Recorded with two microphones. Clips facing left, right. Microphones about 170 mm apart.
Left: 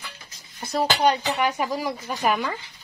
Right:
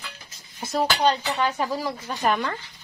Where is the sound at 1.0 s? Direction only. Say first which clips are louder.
Left 1 dB; 10° left (ahead or behind).